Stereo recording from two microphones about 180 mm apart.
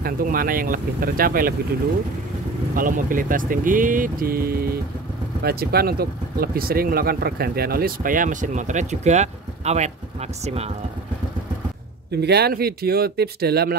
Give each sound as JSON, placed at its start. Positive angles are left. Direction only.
{"t": 0.0, "sound": "speech", "side_deg": -55}
{"t": 2.7, "sound": "speech", "side_deg": -50}
{"t": 12.1, "sound": "speech", "side_deg": -65}